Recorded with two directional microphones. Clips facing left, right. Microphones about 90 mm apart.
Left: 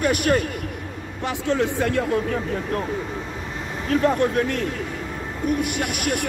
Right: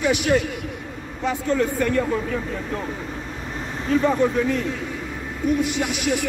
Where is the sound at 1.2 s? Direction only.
80° left.